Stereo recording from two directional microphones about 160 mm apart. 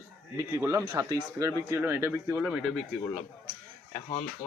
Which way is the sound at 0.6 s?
20° right (ahead or behind).